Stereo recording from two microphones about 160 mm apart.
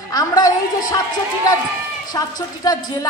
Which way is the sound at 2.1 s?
25° left (ahead or behind).